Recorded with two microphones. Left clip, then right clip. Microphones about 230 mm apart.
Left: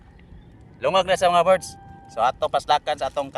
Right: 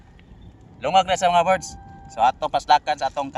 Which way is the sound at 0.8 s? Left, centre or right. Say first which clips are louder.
Right 1 dB; left.